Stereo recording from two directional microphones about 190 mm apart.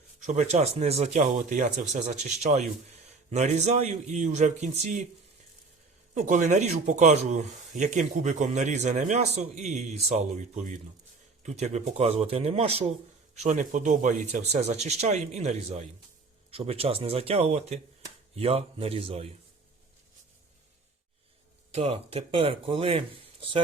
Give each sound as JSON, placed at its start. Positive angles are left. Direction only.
{"t": 0.2, "sound": "speech", "side_deg": -35}
{"t": 6.1, "sound": "speech", "side_deg": -40}
{"t": 21.7, "sound": "speech", "side_deg": -30}